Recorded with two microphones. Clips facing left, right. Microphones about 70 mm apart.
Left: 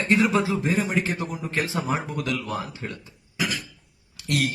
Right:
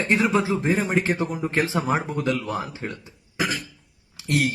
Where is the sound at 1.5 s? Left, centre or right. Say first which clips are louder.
Right 2 dB; right.